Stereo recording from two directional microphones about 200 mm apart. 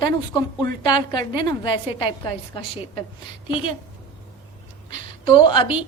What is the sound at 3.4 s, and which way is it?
Speech, 25° left (ahead or behind).